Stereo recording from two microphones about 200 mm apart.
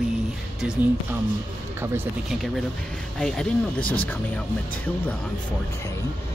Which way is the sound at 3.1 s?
5° left (ahead or behind).